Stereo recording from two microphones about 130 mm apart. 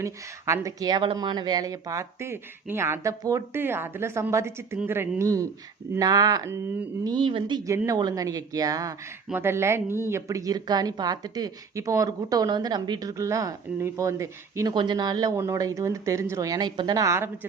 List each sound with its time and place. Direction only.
0.0 s a woman's voice: 25° right (ahead or behind); by 7.6 s 40° right (ahead or behind)
7.7 s a woman's voice: 25° right (ahead or behind)
14.7 s a woman's voice: 35° right (ahead or behind)